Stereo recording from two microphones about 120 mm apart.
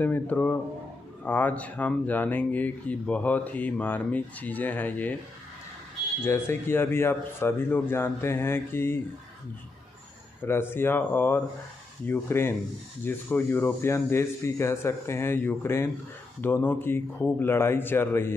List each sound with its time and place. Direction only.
0.0 s speech: 15° left (ahead or behind)
6.2 s speech: 20° left (ahead or behind)
10.4 s speech: 20° left (ahead or behind)